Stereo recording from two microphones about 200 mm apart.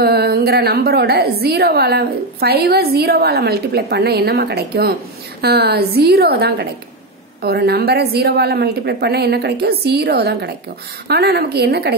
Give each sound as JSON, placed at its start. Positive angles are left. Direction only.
{"t": 0.0, "sound": "a woman's voice", "side_deg": -50}